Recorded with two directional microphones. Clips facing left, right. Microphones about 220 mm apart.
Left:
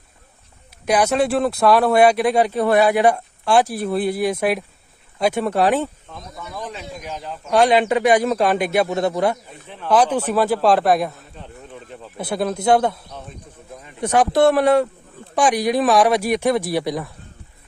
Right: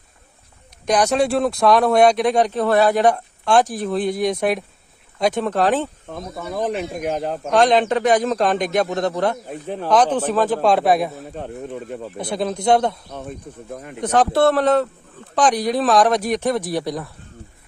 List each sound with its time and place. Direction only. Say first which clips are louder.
0.9 s speech: even; 5° left (ahead or behind)
6.1 s speech: right 7 dB; 55° right (ahead or behind)
7.5 s speech: even; 10° left (ahead or behind)
9.6 s speech: right 7 dB; 40° right (ahead or behind)
9.9 s speech: even; 10° left (ahead or behind)
11.2 s speech: right 10 dB; 55° right (ahead or behind)
12.1 s speech: left 2 dB; 5° left (ahead or behind)
13.7 s speech: right 8 dB; 60° right (ahead or behind)
14.0 s speech: left 1 dB; 10° left (ahead or behind)